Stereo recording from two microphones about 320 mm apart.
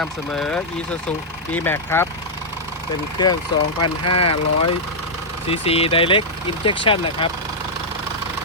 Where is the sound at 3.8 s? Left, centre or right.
Left.